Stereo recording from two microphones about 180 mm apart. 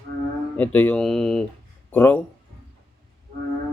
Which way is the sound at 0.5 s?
10° left (ahead or behind).